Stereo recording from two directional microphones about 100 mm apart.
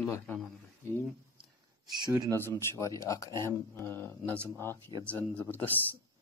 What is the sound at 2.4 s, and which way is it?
Speech, 25° left (ahead or behind).